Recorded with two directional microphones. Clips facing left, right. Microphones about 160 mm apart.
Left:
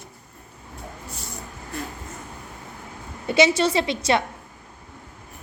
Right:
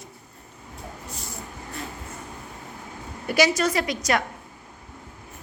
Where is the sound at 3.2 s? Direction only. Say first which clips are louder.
Left 3 dB; 25° left (ahead or behind).